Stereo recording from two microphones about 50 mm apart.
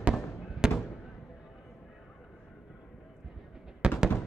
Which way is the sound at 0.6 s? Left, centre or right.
Centre.